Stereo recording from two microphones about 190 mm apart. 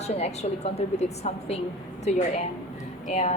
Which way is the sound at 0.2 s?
35° left (ahead or behind).